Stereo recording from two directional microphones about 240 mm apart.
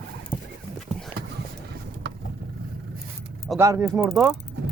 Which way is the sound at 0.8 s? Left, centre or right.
Centre.